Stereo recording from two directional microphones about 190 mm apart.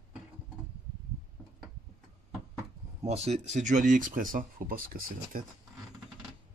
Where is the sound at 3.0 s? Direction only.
35° right (ahead or behind); by 5.4 s 50° right (ahead or behind).